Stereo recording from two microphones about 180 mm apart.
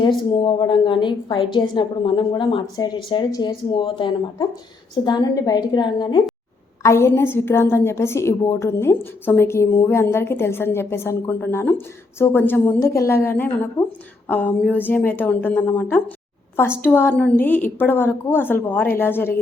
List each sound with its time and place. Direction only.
0.3 s a woman's voice: 25° left (ahead or behind)
6.8 s a woman's voice: 15° left (ahead or behind)